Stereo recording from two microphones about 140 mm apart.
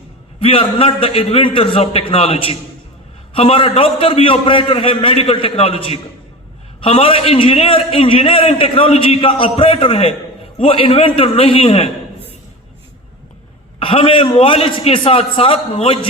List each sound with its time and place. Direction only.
0.3 s a man's voice: 40° left (ahead or behind)
13.7 s a man's voice: 40° left (ahead or behind)